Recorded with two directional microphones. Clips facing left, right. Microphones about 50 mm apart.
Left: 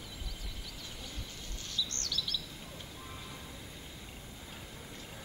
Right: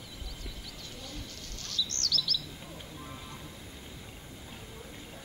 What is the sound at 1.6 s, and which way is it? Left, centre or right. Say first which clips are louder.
Chirp: right 3 dB; centre.